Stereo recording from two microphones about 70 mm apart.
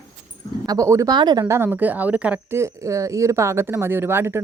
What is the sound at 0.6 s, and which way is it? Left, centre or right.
Speech, right.